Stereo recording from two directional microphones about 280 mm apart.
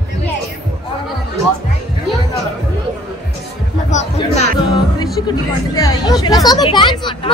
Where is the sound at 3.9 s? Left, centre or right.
Left.